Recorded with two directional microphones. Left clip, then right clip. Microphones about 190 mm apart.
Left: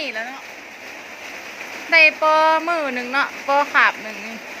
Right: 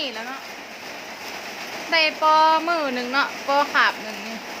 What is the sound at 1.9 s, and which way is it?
Speech, 10° left (ahead or behind).